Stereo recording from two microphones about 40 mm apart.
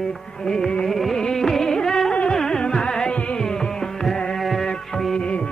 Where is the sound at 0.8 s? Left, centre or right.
Centre.